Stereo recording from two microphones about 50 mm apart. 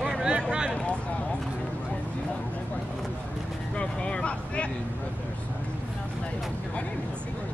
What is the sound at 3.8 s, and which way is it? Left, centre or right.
Vehicle, left.